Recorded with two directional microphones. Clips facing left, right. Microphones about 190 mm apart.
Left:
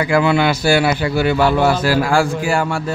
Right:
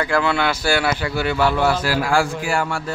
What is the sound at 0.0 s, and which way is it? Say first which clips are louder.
A man's voice: left 5 dB; 10° left (ahead or behind).